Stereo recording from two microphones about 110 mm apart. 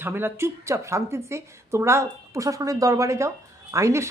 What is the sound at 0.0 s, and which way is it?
A woman's voice, 20° right (ahead or behind).